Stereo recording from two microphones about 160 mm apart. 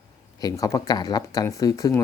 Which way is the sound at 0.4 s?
20° left (ahead or behind).